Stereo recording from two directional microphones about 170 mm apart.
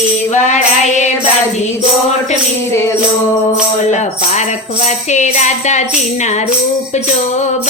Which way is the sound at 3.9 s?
45° left (ahead or behind).